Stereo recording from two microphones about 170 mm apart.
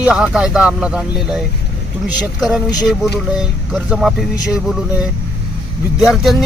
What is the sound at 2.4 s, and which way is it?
Speech, centre (ahead or behind).